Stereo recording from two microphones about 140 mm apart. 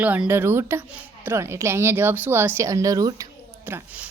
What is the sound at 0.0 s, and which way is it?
A woman's voice, 10° right (ahead or behind).